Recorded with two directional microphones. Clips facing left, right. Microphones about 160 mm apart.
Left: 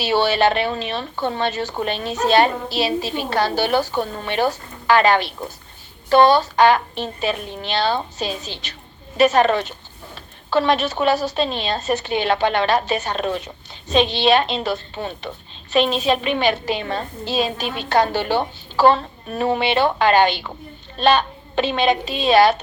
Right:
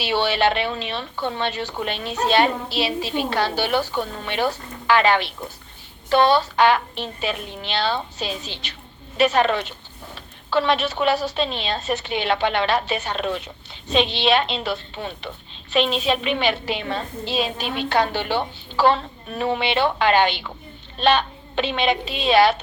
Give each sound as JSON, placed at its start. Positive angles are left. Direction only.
{"t": 0.0, "sound": "a woman's voice", "side_deg": 40}